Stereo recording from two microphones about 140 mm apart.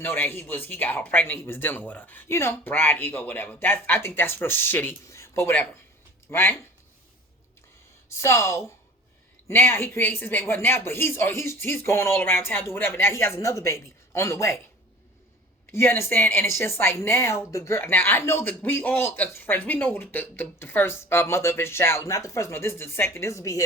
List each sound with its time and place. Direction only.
0.0 s a woman's voice: 15° left (ahead or behind)
8.1 s a woman's voice: 20° left (ahead or behind)
15.7 s a woman's voice: 15° left (ahead or behind)